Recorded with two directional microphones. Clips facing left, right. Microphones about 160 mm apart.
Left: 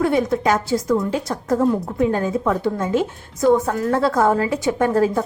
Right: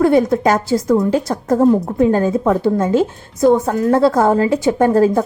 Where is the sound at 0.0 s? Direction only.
40° right (ahead or behind).